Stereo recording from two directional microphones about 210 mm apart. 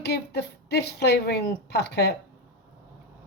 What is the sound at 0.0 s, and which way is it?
A woman's voice, 50° left (ahead or behind).